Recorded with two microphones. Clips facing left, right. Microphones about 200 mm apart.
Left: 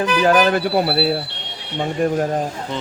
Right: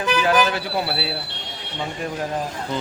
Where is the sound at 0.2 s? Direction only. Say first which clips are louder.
Left 6 dB; 45° left (ahead or behind).